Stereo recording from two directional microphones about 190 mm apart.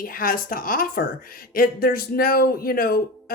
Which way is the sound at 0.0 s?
50° left (ahead or behind).